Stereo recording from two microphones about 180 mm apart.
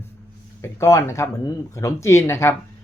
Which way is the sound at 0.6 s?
15° left (ahead or behind).